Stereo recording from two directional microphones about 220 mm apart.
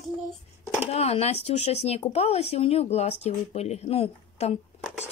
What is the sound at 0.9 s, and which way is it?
Speech, 30° left (ahead or behind).